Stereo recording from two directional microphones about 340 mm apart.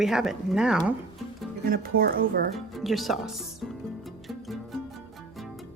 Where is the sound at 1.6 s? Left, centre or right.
Right.